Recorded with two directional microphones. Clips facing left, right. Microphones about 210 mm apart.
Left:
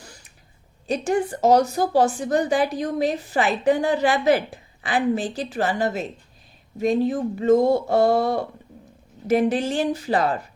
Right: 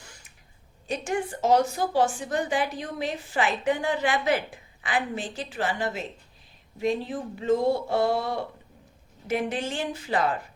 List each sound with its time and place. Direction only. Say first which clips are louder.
0.9 s a woman's voice: left 6 dB; 40° left (ahead or behind)